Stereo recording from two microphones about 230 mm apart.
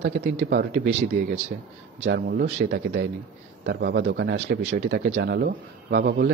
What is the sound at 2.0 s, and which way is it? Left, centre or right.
Speech, right.